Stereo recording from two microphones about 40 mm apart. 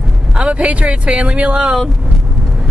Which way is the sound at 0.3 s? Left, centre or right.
Right.